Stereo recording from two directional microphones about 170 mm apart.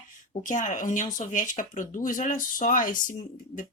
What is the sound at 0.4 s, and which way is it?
Speech, 45° left (ahead or behind).